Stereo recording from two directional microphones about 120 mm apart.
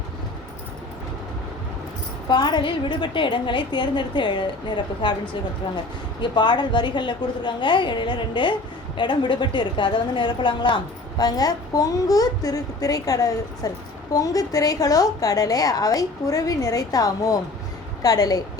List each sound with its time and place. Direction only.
2.3 s a woman's voice: 40° left (ahead or behind)